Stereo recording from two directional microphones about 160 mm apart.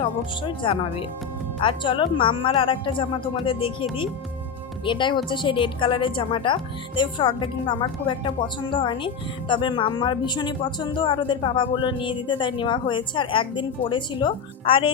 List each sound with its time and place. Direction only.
0.0 s speech: 30° left (ahead or behind)
4.9 s speech: 30° left (ahead or behind)